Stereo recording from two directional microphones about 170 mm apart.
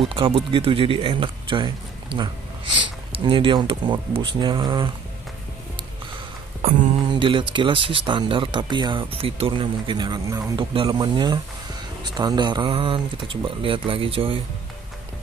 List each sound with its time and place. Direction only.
0.1 s speech: 30° right (ahead or behind)
7.1 s speech: 30° right (ahead or behind)